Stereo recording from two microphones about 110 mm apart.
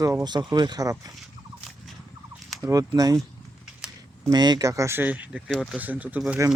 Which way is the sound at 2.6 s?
30° right (ahead or behind).